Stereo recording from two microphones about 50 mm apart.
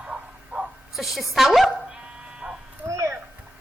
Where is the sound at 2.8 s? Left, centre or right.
Right.